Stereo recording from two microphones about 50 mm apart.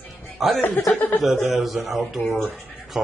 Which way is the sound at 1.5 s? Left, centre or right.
Centre.